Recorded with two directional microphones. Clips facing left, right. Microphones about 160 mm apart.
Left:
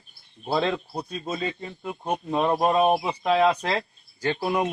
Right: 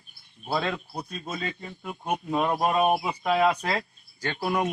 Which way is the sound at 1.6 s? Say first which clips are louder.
Left 2 dB; 5° right (ahead or behind).